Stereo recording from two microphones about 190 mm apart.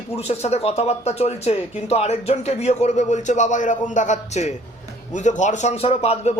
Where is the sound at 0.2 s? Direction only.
35° left (ahead or behind).